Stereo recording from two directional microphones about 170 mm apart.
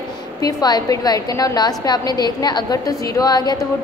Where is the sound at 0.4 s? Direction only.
20° left (ahead or behind).